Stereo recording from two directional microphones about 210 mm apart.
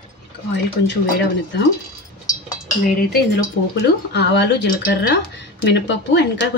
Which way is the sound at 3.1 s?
50° left (ahead or behind).